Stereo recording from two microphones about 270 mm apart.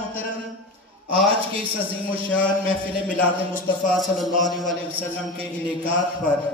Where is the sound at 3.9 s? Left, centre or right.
Centre.